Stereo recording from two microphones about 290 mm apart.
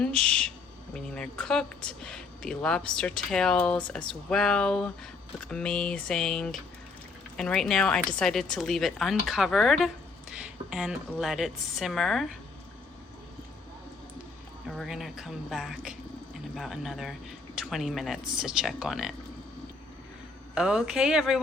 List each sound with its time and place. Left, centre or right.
0.0 s a woman's voice: centre
14.7 s a woman's voice: centre
20.6 s a woman's voice: centre